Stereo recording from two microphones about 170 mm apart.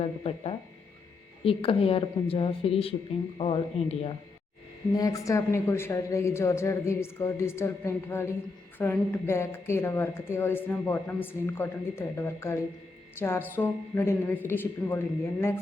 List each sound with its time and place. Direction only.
0.0 s speech: 35° left (ahead or behind)
4.9 s speech: 20° left (ahead or behind)